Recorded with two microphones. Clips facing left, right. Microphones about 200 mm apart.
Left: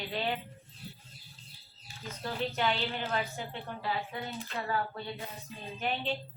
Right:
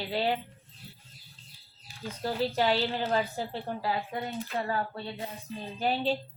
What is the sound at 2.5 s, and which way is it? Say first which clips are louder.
A woman's voice: right 5 dB; 35° right (ahead or behind).